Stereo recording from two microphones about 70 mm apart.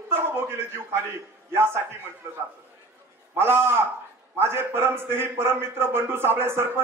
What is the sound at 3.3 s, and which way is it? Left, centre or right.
A man's voice, right.